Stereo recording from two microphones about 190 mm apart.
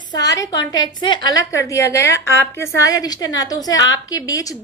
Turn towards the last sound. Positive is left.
turn(degrees=20)  # may be behind; listen again after turning